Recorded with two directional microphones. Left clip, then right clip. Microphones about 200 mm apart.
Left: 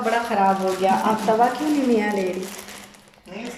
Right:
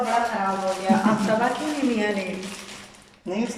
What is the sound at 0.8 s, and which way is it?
Speech, 40° left (ahead or behind).